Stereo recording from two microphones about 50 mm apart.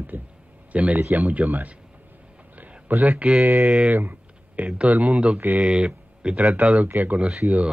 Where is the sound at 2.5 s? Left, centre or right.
Right.